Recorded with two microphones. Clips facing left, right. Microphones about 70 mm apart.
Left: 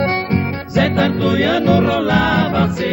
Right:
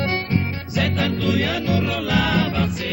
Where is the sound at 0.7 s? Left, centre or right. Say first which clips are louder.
Left 7 dB; left.